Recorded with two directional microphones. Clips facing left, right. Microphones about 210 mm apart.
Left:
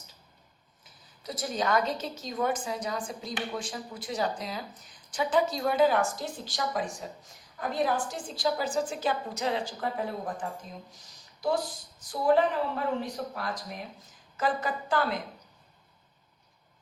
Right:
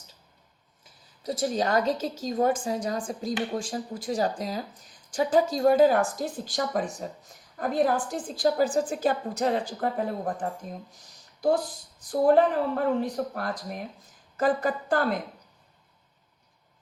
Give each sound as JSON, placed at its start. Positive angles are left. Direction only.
{"t": 1.3, "sound": "a woman's voice", "side_deg": -30}
{"t": 11.9, "sound": "a woman's voice", "side_deg": -50}